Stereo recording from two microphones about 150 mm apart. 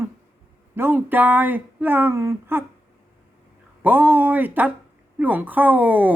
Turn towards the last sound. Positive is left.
turn(degrees=-10)  # may be behind; listen again after turning